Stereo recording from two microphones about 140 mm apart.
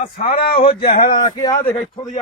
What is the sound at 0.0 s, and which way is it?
Speech, 75° left (ahead or behind).